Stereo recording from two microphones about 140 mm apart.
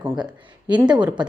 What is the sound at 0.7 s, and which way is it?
Speech, 10° right (ahead or behind).